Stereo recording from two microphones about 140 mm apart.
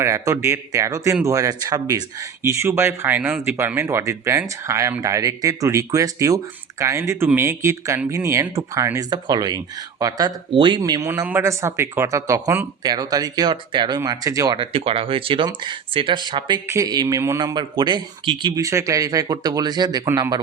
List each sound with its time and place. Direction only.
0.0 s speech: 20° right (ahead or behind)
10.5 s speech: 35° right (ahead or behind)
11.1 s speech: 15° right (ahead or behind)
12.8 s speech: 30° right (ahead or behind)
18.6 s speech: 20° right (ahead or behind)
20.1 s speech: 20° right (ahead or behind)